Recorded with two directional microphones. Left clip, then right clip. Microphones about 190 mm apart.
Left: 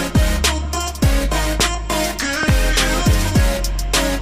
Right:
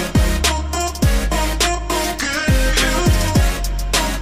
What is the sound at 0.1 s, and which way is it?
Music, centre (ahead or behind).